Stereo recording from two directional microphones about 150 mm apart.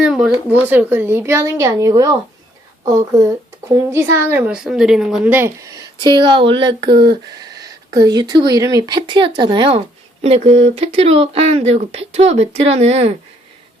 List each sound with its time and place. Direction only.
0.0 s speech: 5° right (ahead or behind); by 2.1 s 25° right (ahead or behind)
3.8 s speech: 20° right (ahead or behind)
6.9 s speech: 90° right
7.3 s speech: 25° right (ahead or behind); by 13.1 s 45° right (ahead or behind)